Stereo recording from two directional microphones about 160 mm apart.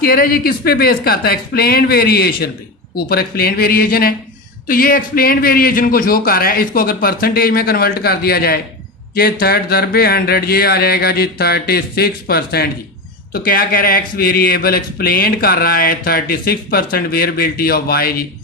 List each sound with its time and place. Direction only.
0.0 s speech: 70° left (ahead or behind)
13.3 s speech: 65° left (ahead or behind)